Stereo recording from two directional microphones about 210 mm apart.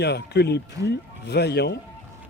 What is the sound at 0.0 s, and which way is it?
Speech, 50° left (ahead or behind).